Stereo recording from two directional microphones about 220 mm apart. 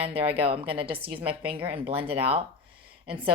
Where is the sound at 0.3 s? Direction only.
25° right (ahead or behind).